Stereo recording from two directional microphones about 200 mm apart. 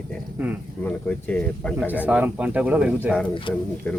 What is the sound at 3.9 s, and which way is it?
Speech, 5° left (ahead or behind).